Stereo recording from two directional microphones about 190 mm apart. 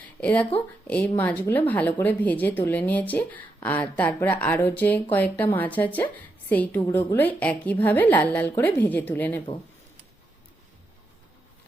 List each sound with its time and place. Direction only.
0.2 s speech: 5° left (ahead or behind)